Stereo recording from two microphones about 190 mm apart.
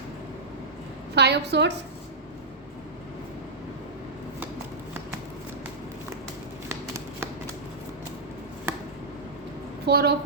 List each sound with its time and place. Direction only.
1.1 s a woman's voice: 60° right (ahead or behind)
6.7 s a sound: 15° right (ahead or behind)
9.8 s a woman's voice: 60° right (ahead or behind)